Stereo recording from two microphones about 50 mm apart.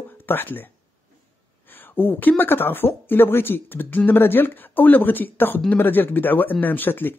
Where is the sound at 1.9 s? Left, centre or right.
Left.